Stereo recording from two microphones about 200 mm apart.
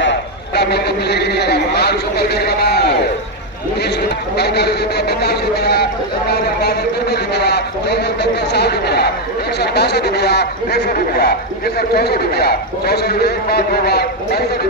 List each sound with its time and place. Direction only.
0.6 s a man's voice: 55° left (ahead or behind)
4.4 s a man's voice: 55° left (ahead or behind)